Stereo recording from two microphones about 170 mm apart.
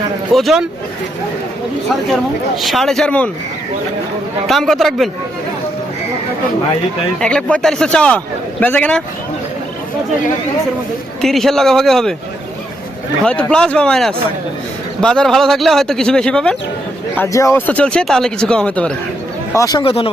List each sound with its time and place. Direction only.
0.3 s speech: centre (ahead or behind)
2.6 s speech: centre (ahead or behind)
4.4 s speech: centre (ahead or behind)
7.2 s speech: 5° left (ahead or behind)
11.2 s speech: centre (ahead or behind)
13.2 s speech: 5° left (ahead or behind)
17.2 s speech: 15° left (ahead or behind)
19.5 s speech: 20° left (ahead or behind)
19.8 s speech: 35° left (ahead or behind)